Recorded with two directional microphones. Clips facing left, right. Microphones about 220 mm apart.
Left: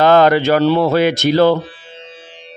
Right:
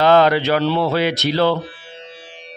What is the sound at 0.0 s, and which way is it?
A man's voice, 50° left (ahead or behind).